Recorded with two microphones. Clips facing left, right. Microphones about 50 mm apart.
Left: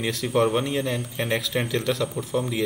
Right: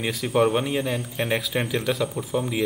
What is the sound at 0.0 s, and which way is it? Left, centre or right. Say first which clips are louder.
A man's voice: right 1 dB; centre.